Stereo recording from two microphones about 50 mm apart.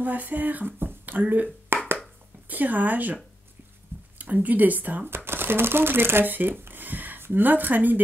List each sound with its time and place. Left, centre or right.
0.0 s speech: right
1.7 s a sound: right
2.4 s speech: right
4.2 s speech: right
5.1 s speech: right